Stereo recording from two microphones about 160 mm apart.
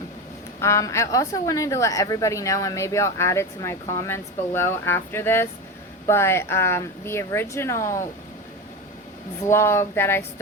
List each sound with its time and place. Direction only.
0.6 s a woman's voice: 20° left (ahead or behind)
9.4 s speech: 15° left (ahead or behind)